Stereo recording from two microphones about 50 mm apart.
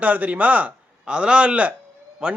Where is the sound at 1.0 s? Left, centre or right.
Right.